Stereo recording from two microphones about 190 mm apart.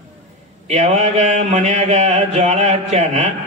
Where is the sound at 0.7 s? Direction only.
35° right (ahead or behind).